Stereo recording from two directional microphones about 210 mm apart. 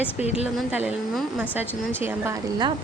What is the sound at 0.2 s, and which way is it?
Speech, 30° left (ahead or behind).